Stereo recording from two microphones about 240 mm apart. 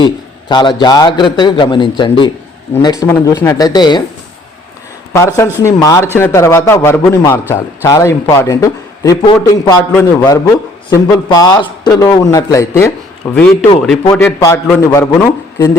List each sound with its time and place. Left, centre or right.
0.0 s a sound: centre
0.8 s a man's voice: centre
5.1 s a man's voice: centre